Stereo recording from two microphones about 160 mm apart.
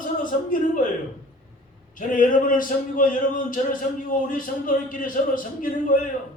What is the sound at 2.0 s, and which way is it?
A man's voice, 55° left (ahead or behind).